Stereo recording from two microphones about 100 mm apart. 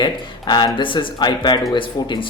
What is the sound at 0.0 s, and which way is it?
Speech, 50° left (ahead or behind).